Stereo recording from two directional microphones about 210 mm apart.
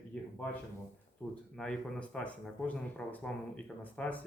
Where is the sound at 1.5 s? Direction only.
5° left (ahead or behind).